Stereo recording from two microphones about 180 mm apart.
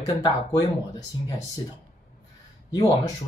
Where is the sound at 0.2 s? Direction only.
20° left (ahead or behind).